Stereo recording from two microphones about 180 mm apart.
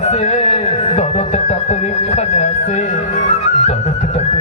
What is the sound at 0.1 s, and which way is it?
Speech, 40° left (ahead or behind).